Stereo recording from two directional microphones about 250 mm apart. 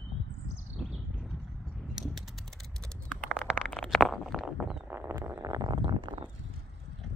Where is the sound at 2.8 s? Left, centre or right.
Centre.